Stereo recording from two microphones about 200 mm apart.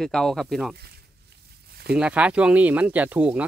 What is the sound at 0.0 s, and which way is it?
Speech, 5° left (ahead or behind).